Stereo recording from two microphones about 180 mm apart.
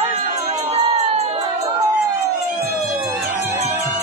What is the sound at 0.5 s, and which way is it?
Music, 35° right (ahead or behind).